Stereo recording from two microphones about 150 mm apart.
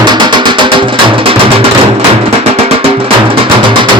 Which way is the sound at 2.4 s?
40° right (ahead or behind).